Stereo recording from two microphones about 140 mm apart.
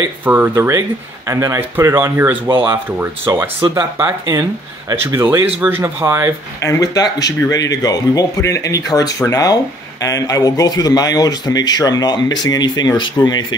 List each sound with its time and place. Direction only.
0.2 s speech: 15° right (ahead or behind)
6.6 s speech: 25° left (ahead or behind)